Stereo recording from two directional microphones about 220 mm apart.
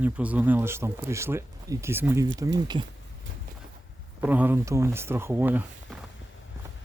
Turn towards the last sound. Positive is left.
turn(degrees=-10)  # may be behind; listen again after turning